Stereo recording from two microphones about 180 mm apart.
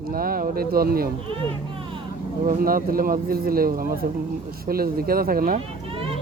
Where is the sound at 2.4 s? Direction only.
50° right (ahead or behind).